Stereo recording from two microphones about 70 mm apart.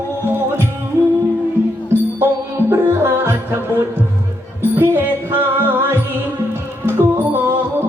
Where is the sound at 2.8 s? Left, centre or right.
Right.